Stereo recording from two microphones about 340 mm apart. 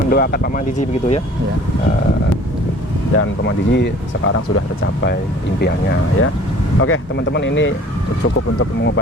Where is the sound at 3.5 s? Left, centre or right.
Left.